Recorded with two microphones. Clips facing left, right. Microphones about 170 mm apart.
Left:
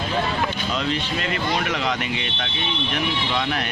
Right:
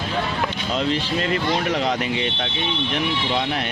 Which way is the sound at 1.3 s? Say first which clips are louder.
Right 2 dB; 30° right (ahead or behind).